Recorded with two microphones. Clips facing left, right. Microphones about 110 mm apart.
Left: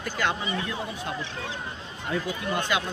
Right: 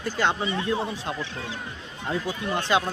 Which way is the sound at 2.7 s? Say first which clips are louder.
Right 6 dB; 30° right (ahead or behind).